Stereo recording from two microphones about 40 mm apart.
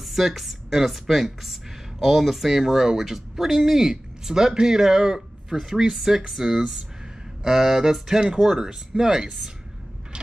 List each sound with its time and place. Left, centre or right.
0.0 s speech: centre